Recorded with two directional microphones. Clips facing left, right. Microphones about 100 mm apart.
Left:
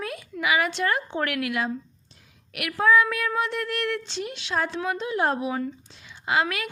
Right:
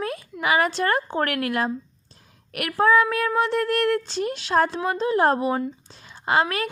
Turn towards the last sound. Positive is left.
turn(degrees=-35)  # may be behind; listen again after turning